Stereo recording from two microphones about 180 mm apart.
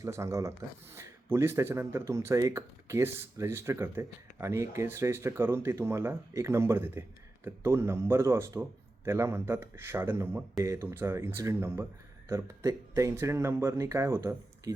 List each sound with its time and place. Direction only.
0.0 s speech: 15° right (ahead or behind)